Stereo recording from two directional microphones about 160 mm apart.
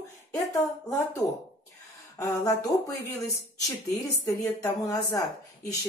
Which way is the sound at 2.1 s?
20° left (ahead or behind).